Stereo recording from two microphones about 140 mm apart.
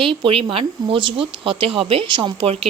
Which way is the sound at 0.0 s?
40° right (ahead or behind).